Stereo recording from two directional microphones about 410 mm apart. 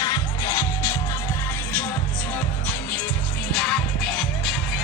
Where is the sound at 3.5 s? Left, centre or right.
Centre.